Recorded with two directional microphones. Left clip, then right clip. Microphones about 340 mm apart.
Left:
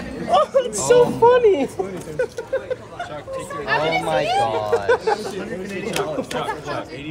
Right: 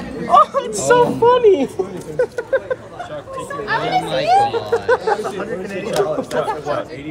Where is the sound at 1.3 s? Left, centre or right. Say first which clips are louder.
Right 3 dB; centre.